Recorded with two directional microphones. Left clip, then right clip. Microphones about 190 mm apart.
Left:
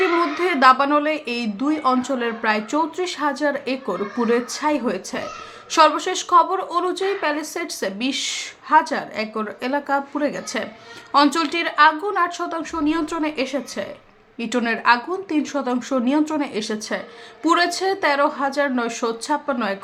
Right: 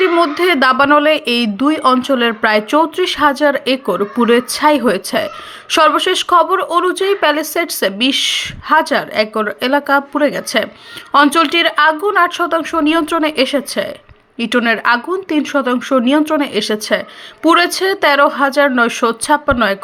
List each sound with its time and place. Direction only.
0.2 s speech: 25° right (ahead or behind)